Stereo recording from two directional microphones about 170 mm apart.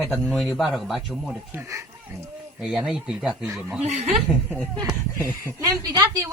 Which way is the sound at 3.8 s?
40° right (ahead or behind).